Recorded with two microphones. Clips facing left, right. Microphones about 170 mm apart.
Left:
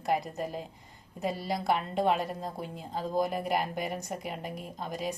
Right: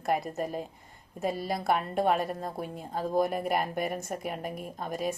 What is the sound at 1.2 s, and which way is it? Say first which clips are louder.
Speech: right 1 dB; 50° right (ahead or behind).